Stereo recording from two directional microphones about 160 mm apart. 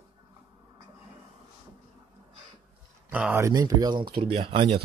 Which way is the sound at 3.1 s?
10° right (ahead or behind).